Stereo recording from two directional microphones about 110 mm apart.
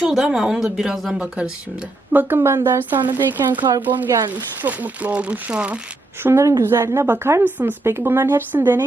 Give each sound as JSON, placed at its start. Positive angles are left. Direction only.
{"t": 0.0, "sound": "speech", "side_deg": -5}
{"t": 2.1, "sound": "a woman's voice", "side_deg": -20}
{"t": 4.1, "sound": "speech", "side_deg": -30}
{"t": 4.6, "sound": "speech", "side_deg": -15}
{"t": 6.2, "sound": "a woman's voice", "side_deg": -25}